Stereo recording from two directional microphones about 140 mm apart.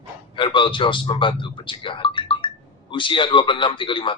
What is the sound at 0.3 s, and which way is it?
A man's voice, 35° left (ahead or behind).